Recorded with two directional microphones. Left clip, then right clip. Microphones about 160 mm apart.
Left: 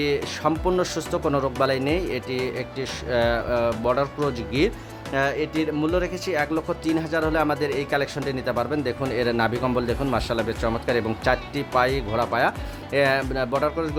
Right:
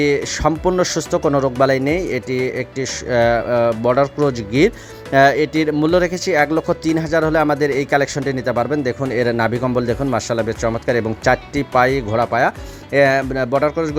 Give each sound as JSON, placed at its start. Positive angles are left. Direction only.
{"t": 0.0, "sound": "speech", "side_deg": -40}
{"t": 5.1, "sound": "speech", "side_deg": -50}